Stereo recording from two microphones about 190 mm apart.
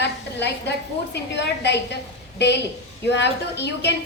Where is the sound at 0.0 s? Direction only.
65° left (ahead or behind).